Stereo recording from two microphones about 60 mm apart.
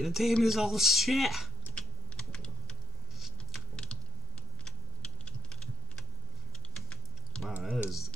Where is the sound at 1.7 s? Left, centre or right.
Centre.